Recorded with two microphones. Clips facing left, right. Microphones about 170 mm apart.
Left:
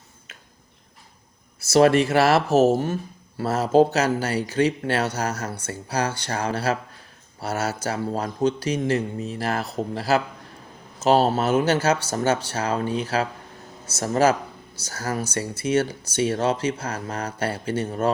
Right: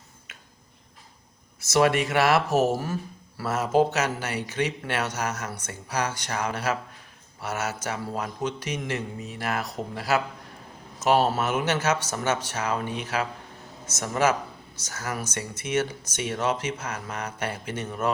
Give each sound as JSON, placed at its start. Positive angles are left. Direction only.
{"t": 1.6, "sound": "speech", "side_deg": 30}